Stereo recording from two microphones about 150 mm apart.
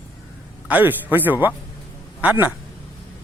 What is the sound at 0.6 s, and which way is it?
A man's voice, 10° right (ahead or behind).